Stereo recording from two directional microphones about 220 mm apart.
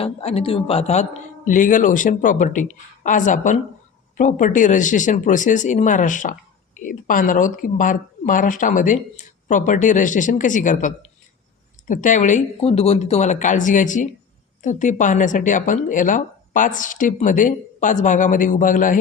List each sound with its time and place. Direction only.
0.0 s a man's voice: 30° left (ahead or behind)